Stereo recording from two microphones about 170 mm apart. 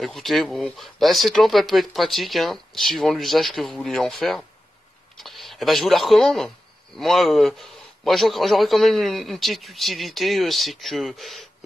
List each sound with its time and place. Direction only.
0.0 s speech: centre (ahead or behind)